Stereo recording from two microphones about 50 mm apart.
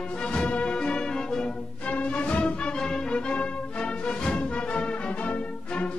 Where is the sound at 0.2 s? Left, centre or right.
Left.